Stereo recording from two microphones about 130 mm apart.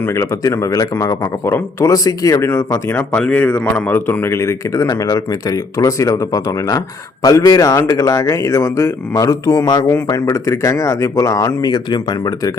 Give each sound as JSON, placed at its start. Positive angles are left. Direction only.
{"t": 0.0, "sound": "speech", "side_deg": 20}